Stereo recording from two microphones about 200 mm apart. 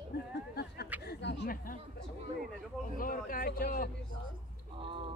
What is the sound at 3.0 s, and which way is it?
Speech, 45° left (ahead or behind).